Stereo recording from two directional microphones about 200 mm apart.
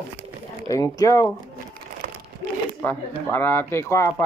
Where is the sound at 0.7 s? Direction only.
15° left (ahead or behind).